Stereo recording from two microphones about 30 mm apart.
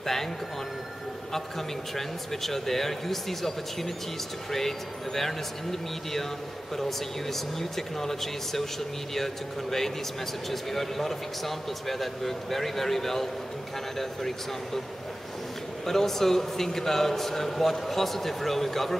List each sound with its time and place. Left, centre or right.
0.0 s speech: centre
2.0 s a man's voice: centre
15.8 s a man's voice: centre